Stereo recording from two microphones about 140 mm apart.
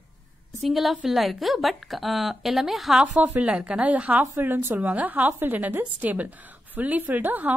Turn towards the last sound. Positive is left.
turn(degrees=-10)  # may be behind; listen again after turning